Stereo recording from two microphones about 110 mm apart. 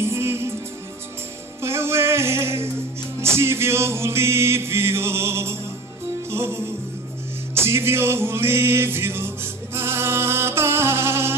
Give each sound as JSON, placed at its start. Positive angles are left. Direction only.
{"t": 0.0, "sound": "music", "side_deg": -25}
{"t": 1.6, "sound": "music", "side_deg": -25}